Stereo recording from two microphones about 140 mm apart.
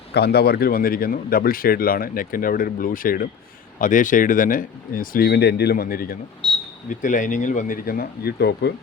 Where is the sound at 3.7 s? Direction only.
70° left (ahead or behind); by 6.1 s 90° left.